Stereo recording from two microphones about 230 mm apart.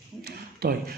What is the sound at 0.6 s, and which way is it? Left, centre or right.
Speech, right.